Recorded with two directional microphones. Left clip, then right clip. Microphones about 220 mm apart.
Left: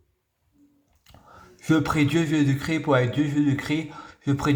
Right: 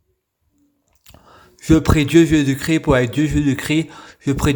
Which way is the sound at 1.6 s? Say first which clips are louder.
Right 6 dB; 35° right (ahead or behind).